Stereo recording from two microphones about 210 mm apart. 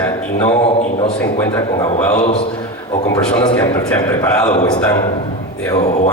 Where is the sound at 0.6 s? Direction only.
30° left (ahead or behind).